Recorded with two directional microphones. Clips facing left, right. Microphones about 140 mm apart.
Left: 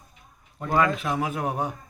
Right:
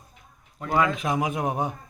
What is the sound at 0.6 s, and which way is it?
Speech, 15° right (ahead or behind).